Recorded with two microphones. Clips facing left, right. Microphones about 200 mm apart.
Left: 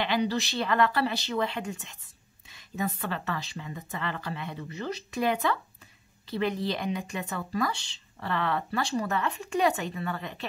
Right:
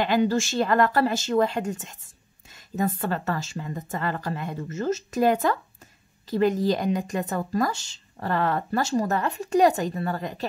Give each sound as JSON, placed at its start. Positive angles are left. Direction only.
{"t": 0.0, "sound": "speech", "side_deg": -45}